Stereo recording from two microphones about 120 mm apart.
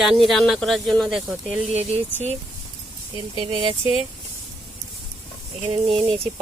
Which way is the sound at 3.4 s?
45° right (ahead or behind).